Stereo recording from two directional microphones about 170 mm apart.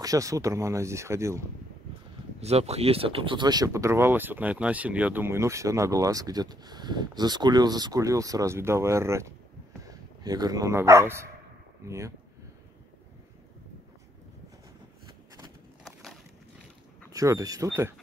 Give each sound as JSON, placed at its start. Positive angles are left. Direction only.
{"t": 0.0, "sound": "speech", "side_deg": -20}
{"t": 2.4, "sound": "speech", "side_deg": -40}
{"t": 15.8, "sound": "a sound", "side_deg": 0}
{"t": 17.1, "sound": "speech", "side_deg": -20}